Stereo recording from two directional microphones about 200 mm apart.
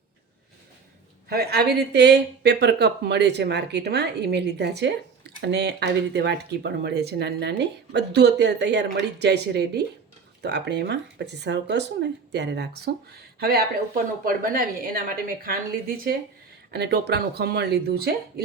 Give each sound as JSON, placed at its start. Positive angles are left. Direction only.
{"t": 1.3, "sound": "speech", "side_deg": -55}
{"t": 16.7, "sound": "speech", "side_deg": -55}